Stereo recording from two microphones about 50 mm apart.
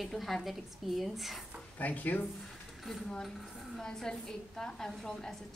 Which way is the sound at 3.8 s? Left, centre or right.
Centre.